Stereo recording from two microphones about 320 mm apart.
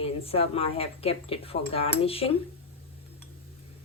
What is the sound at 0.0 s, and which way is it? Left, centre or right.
Speech, centre.